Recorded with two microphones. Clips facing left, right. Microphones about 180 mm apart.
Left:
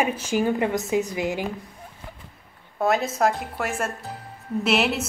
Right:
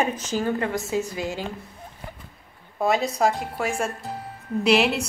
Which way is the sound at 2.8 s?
Centre (ahead or behind).